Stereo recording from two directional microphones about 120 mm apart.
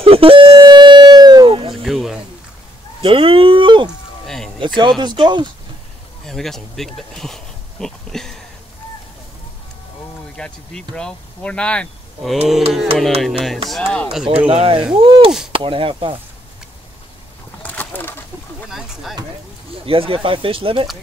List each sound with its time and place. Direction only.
0.0 s music: 50° right (ahead or behind)
1.8 s a sound: centre (ahead or behind)
3.0 s a sound: 50° right (ahead or behind)
5.0 s speech: 40° right (ahead or behind)
6.2 s speech: 5° left (ahead or behind)
10.3 s speech: 5° left (ahead or behind)
14.5 s speech: 50° right (ahead or behind)
17.6 s bird: 15° left (ahead or behind)
18.7 s a sound: 5° right (ahead or behind)
19.9 s speech: 50° right (ahead or behind)